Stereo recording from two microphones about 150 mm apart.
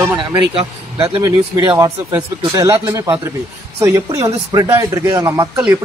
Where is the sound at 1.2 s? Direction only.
25° right (ahead or behind).